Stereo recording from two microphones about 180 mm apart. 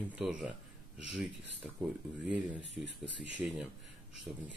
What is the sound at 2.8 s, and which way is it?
Speech, 80° right.